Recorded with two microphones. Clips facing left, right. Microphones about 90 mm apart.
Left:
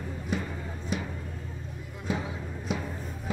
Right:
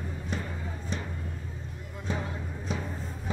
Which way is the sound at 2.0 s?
5° left (ahead or behind).